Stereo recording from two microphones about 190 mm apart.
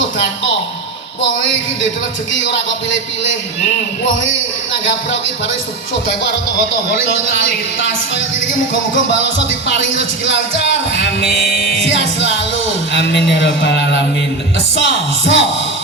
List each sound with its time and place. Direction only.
10.2 s music: 70° left (ahead or behind)
12.9 s speech: 65° left (ahead or behind)
14.8 s music: 65° left (ahead or behind)